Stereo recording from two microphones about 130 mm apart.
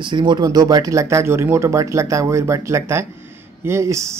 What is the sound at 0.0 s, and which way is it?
Speech, 35° right (ahead or behind).